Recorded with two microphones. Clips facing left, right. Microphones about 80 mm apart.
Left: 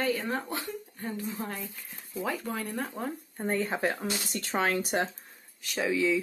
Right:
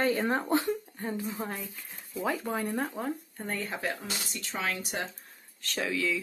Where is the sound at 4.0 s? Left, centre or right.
Left.